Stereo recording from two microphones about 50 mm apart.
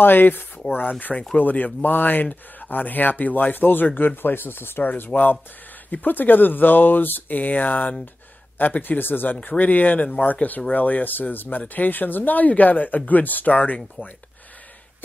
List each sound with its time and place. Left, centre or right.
0.0 s speech: left